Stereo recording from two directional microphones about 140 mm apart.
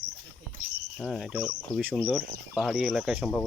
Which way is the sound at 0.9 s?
5° left (ahead or behind).